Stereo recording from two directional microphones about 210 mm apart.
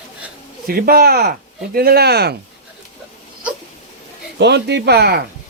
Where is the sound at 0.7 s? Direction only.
45° right (ahead or behind).